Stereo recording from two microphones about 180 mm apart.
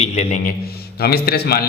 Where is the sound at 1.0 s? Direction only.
60° left (ahead or behind).